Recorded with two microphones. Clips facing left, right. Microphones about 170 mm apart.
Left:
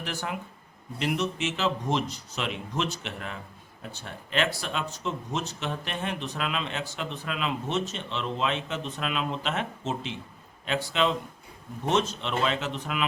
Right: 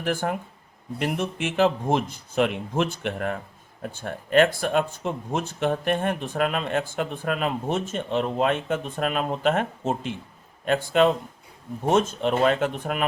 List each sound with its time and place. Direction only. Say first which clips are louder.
0.0 s speech: right 8 dB; 50° right (ahead or behind)